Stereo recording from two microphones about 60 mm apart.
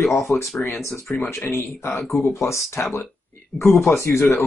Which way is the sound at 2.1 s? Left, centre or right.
Left.